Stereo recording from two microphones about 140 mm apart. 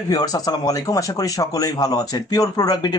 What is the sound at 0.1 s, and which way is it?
Speech, 25° left (ahead or behind).